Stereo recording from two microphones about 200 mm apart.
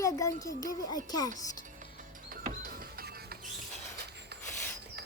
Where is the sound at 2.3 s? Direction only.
45° right (ahead or behind).